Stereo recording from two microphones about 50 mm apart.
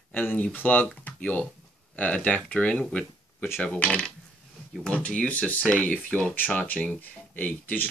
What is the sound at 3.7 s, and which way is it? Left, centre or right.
Speech, left.